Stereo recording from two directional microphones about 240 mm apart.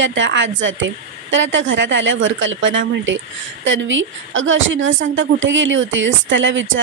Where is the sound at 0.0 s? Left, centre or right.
Right.